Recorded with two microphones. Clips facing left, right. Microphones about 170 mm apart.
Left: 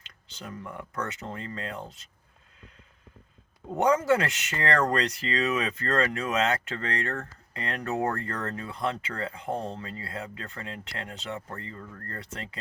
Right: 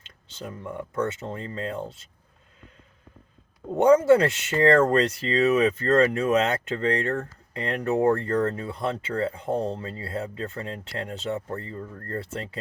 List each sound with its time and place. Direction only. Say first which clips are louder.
0.3 s speech: right 5 dB; 25° right (ahead or behind)
3.8 s speech: right 7 dB; 30° right (ahead or behind)